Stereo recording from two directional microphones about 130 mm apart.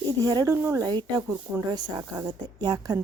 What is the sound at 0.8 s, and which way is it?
A woman's voice, 35° right (ahead or behind).